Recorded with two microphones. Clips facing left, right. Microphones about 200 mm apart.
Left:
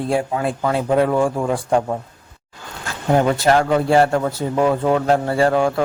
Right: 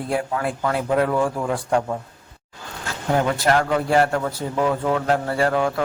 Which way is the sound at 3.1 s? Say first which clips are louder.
Left 4 dB; 25° left (ahead or behind).